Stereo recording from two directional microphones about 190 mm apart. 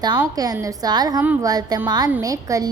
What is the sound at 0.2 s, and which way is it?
A woman's voice, 20° right (ahead or behind).